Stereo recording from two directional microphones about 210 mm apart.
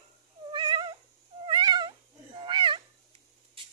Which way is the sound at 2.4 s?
25° right (ahead or behind).